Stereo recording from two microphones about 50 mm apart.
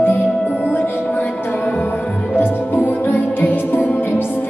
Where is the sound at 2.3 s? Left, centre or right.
Left.